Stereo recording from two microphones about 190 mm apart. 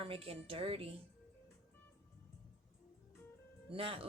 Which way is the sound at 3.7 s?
30° right (ahead or behind).